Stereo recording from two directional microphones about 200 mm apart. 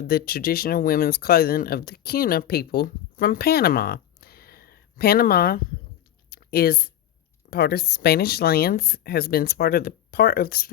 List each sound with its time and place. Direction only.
0.1 s speech: 50° left (ahead or behind)
6.3 s a sound: 50° left (ahead or behind)
7.5 s speech: 50° left (ahead or behind)